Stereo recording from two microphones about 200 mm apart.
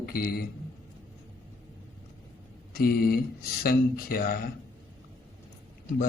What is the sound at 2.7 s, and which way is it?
A man's voice, 50° left (ahead or behind).